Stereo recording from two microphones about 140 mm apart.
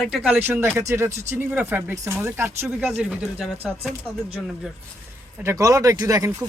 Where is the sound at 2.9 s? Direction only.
5° right (ahead or behind).